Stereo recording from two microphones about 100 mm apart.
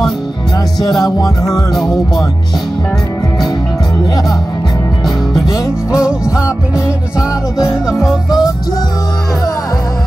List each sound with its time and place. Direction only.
1.0 s music: 35° left (ahead or behind)
5.0 s music: centre (ahead or behind)
8.0 s music: 5° right (ahead or behind)